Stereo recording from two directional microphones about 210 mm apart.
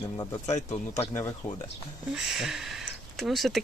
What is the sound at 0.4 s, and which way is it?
Speech, 35° left (ahead or behind).